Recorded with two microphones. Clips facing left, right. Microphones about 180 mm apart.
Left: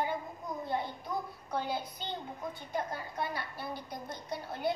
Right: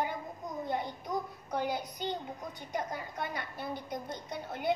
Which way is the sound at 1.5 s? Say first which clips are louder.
Right 1 dB; 20° right (ahead or behind).